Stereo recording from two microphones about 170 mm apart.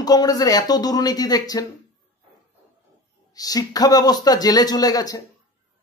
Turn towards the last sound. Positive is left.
turn(degrees=20)  # may be behind; listen again after turning